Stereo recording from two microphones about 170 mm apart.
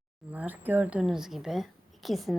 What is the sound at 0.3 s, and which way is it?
A woman's voice, 10° right (ahead or behind).